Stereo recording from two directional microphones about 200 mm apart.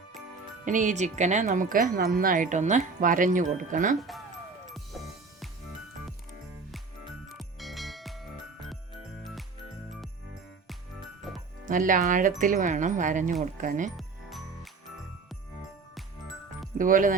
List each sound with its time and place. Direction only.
0.6 s chime: 40° right (ahead or behind)
4.9 s music: centre (ahead or behind)
7.3 s music: centre (ahead or behind)
11.7 s chime: 40° right (ahead or behind)
13.9 s music: centre (ahead or behind)
16.7 s speech: 40° right (ahead or behind)